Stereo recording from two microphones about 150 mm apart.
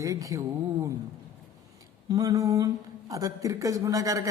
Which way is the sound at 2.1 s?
25° right (ahead or behind).